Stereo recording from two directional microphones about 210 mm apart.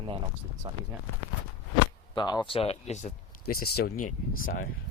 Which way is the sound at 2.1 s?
20° left (ahead or behind).